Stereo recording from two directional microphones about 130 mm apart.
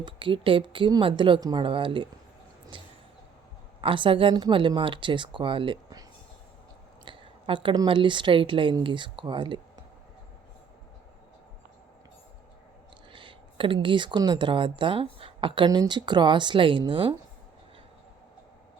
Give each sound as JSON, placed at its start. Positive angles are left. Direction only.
{"t": 0.0, "sound": "speech", "side_deg": -40}
{"t": 2.7, "sound": "a sound", "side_deg": -40}
{"t": 3.8, "sound": "speech", "side_deg": -40}
{"t": 7.0, "sound": "a sound", "side_deg": -40}
{"t": 7.9, "sound": "speech", "side_deg": -40}
{"t": 13.1, "sound": "speech", "side_deg": -40}